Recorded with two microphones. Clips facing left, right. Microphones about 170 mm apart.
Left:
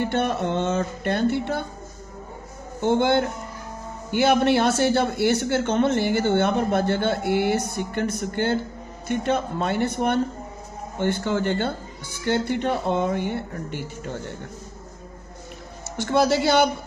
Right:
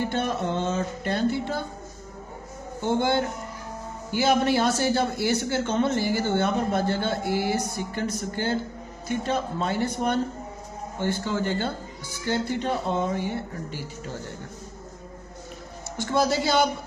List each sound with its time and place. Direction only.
0.0 s speech: 60° left (ahead or behind)
2.8 s speech: 55° left (ahead or behind)
16.1 s speech: 60° left (ahead or behind)